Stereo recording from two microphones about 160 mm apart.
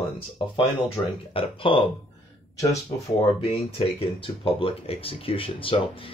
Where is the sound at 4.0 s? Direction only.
35° left (ahead or behind).